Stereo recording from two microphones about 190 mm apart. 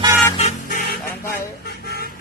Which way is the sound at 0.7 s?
50° left (ahead or behind).